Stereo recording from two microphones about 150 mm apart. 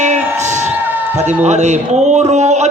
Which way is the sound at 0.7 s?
10° right (ahead or behind).